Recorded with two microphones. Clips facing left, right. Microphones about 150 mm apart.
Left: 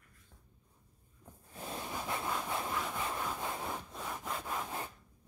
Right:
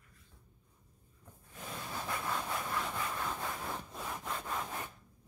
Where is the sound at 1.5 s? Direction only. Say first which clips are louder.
Left 3 dB; 30° left (ahead or behind).